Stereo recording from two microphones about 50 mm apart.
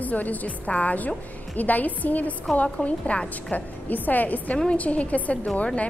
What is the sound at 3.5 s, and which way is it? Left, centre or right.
A woman's voice, left.